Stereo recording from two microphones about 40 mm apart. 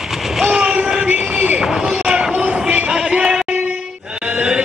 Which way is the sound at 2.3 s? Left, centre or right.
Right.